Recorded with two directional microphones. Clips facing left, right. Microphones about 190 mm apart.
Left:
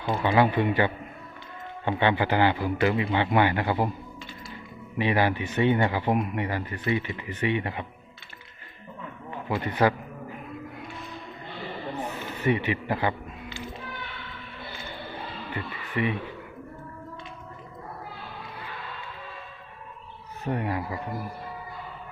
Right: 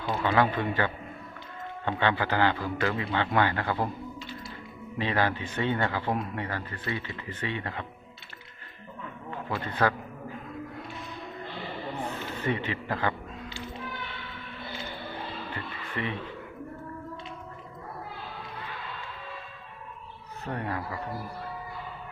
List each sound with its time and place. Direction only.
0.0 s speech: 15° left (ahead or behind)
4.9 s speech: 15° left (ahead or behind)
9.5 s speech: 15° left (ahead or behind)
12.4 s speech: 15° left (ahead or behind)
15.5 s music: 10° left (ahead or behind)
20.4 s speech: 10° left (ahead or behind)